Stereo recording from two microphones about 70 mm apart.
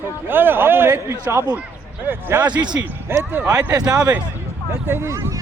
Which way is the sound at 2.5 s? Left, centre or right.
Right.